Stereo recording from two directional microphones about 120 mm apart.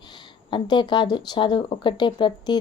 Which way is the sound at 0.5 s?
40° left (ahead or behind).